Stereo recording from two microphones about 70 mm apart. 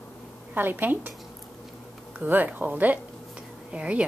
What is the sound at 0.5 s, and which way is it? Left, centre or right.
Speech, right.